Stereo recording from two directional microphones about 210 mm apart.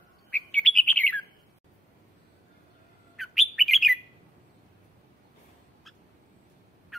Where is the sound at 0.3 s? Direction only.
5° left (ahead or behind).